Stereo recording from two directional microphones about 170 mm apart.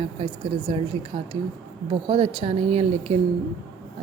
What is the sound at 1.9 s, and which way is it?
A woman's voice, 30° right (ahead or behind).